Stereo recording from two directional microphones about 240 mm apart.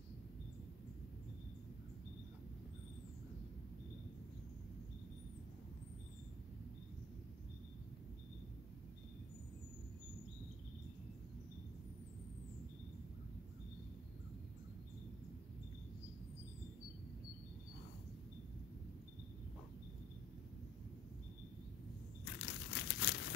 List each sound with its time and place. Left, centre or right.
22.2 s crumpling: left